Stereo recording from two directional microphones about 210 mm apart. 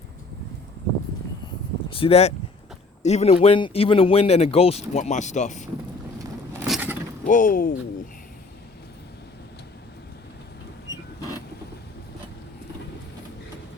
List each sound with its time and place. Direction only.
1.9 s speech: 25° left (ahead or behind)
6.6 s a sound: 5° right (ahead or behind)
7.3 s speech: 40° left (ahead or behind)